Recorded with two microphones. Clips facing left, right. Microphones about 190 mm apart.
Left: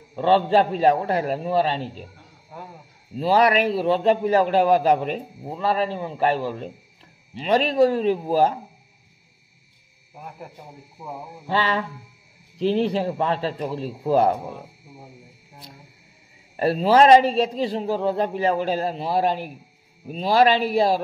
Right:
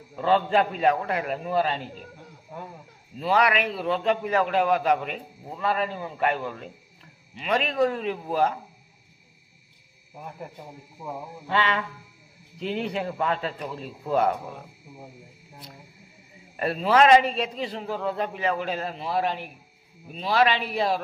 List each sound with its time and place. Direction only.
0.1 s a man's voice: 30° left (ahead or behind)
3.2 s a man's voice: 35° left (ahead or behind)
10.1 s a man's voice: 5° left (ahead or behind)
11.4 s a man's voice: 35° left (ahead or behind)
16.5 s a man's voice: 35° left (ahead or behind)